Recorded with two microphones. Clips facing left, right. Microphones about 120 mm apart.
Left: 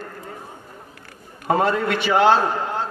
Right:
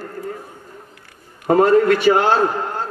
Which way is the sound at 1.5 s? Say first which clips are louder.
Right 7 dB; 45° right (ahead or behind).